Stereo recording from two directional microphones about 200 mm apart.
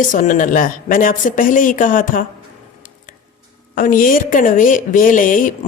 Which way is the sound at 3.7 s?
45° left (ahead or behind).